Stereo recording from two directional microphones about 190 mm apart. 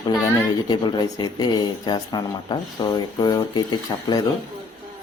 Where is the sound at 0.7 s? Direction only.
25° left (ahead or behind).